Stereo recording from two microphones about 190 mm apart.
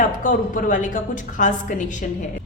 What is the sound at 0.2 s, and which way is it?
A woman's voice, 45° left (ahead or behind).